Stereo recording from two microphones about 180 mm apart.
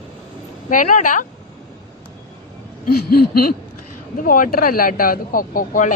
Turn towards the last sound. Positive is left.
turn(degrees=45)  # may be behind; listen again after turning